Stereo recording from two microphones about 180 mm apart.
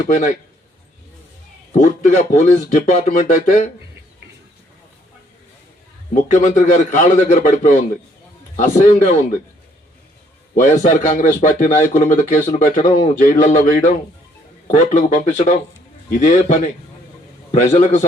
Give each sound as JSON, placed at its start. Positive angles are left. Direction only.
{"t": 0.1, "sound": "speech", "side_deg": 45}
{"t": 1.7, "sound": "speech", "side_deg": 40}
{"t": 6.4, "sound": "speech", "side_deg": 40}
{"t": 10.5, "sound": "speech", "side_deg": 45}